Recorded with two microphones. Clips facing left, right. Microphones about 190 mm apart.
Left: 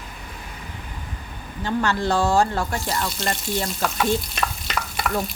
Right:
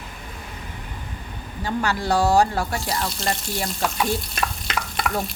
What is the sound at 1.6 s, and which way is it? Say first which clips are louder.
Speech: left 1 dB; 10° right (ahead or behind).